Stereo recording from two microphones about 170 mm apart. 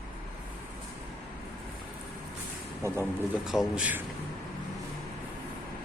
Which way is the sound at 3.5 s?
5° right (ahead or behind).